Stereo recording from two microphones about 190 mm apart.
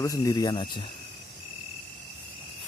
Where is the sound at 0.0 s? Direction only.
15° left (ahead or behind).